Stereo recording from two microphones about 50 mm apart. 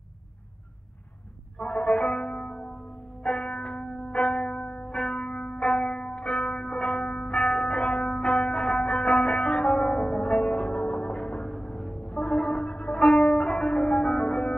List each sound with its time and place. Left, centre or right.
1.8 s music: centre
2.2 s music: left
2.5 s music: centre
3.3 s church bell: centre
4.7 s music: centre
5.6 s zither: centre
6.8 s church bell: centre
7.3 s music: centre